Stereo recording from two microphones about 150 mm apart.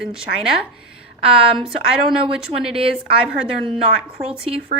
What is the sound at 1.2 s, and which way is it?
Speech, 40° right (ahead or behind).